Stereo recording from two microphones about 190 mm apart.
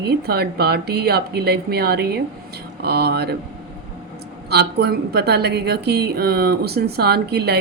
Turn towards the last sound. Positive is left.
turn(degrees=-60)  # may be behind; listen again after turning